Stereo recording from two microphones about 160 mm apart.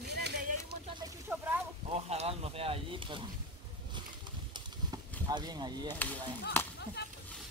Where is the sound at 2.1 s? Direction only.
40° right (ahead or behind).